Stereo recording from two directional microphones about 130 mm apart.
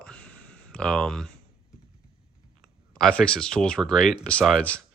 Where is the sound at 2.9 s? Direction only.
5° left (ahead or behind).